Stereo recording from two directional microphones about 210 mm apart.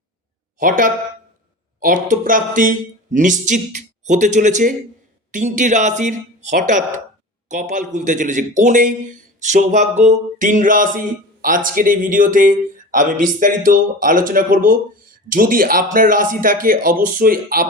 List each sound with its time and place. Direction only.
0.6 s a man's voice: 40° right (ahead or behind)